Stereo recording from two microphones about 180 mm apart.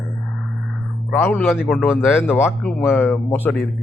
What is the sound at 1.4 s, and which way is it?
Speech, centre (ahead or behind).